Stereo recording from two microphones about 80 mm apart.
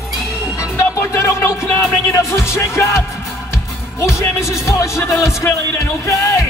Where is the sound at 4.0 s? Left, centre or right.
Left.